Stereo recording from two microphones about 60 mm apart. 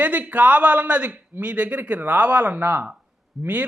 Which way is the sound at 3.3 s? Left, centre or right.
Centre.